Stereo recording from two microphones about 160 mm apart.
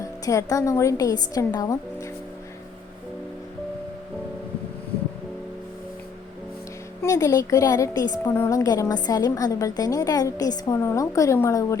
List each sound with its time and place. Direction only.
0.0 s a woman's voice: 20° left (ahead or behind)
7.0 s a woman's voice: 20° left (ahead or behind)